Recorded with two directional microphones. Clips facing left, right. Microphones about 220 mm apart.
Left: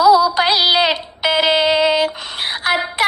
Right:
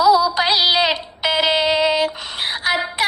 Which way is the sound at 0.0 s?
55° left (ahead or behind).